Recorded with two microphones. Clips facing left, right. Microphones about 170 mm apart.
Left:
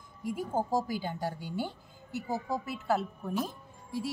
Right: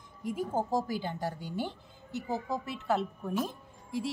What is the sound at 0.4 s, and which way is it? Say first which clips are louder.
A woman's voice: even; 10° left (ahead or behind).